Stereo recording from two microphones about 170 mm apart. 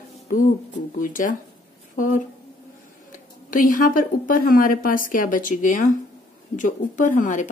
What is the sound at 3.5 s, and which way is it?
A woman's voice, 55° left (ahead or behind).